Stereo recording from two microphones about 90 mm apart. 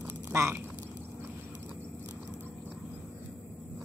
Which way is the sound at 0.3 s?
30° right (ahead or behind).